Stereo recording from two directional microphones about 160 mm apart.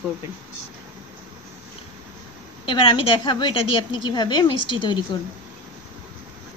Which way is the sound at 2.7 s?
30° left (ahead or behind).